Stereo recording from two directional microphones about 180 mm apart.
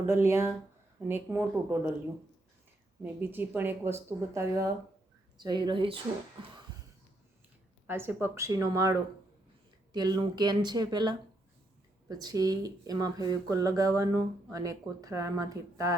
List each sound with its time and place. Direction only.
0.1 s speech: 15° right (ahead or behind)
3.0 s speech: 10° right (ahead or behind); by 6.0 s 30° right (ahead or behind)
7.9 s speech: 15° right (ahead or behind)